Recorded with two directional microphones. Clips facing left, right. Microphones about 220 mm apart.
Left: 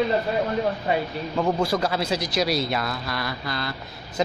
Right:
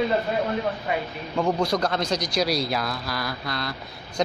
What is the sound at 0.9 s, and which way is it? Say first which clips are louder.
Speech: left 4 dB; 30° left (ahead or behind).